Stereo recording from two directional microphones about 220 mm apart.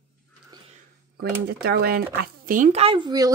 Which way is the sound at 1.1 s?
45° right (ahead or behind).